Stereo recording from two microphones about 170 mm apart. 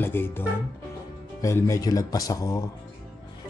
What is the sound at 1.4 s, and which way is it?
Speech, 15° left (ahead or behind).